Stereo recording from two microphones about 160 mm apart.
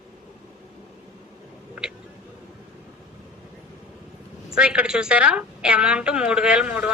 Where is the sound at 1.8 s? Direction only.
10° right (ahead or behind).